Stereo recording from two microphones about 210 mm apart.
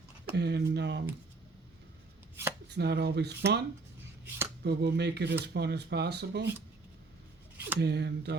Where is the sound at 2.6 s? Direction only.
55° right (ahead or behind).